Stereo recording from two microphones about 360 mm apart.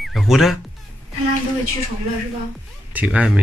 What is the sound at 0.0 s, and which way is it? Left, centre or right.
Speech, centre.